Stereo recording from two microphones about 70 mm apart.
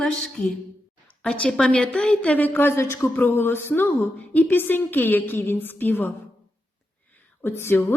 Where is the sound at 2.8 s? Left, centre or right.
Left.